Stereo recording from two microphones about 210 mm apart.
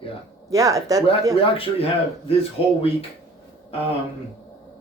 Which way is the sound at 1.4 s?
25° left (ahead or behind).